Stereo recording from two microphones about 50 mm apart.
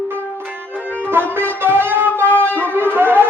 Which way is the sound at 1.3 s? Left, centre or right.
Right.